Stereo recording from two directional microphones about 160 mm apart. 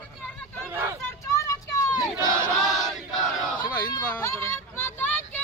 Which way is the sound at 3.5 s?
25° left (ahead or behind).